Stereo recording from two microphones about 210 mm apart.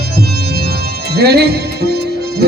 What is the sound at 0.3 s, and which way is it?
Music, 50° right (ahead or behind).